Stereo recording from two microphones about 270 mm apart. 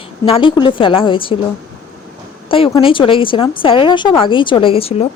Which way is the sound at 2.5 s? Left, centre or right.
Centre.